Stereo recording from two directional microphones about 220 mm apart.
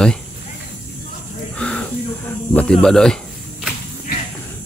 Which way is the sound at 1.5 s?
5° left (ahead or behind).